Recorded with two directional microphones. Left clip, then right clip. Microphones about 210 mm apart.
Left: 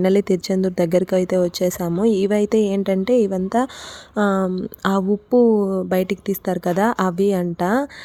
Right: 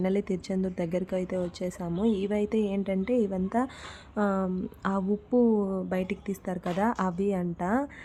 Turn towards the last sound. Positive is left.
turn(degrees=30)  # may be behind; listen again after turning